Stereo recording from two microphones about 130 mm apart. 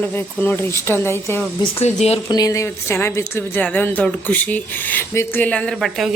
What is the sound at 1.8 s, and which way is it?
Speech, 55° left (ahead or behind).